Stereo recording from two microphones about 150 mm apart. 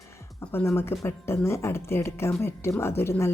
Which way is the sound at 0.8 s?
15° left (ahead or behind).